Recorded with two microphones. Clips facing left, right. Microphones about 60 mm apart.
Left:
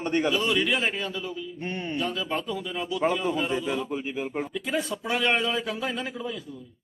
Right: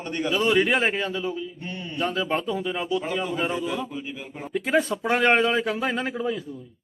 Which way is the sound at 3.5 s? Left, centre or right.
Left.